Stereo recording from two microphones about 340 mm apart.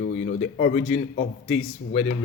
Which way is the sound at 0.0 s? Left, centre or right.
Left.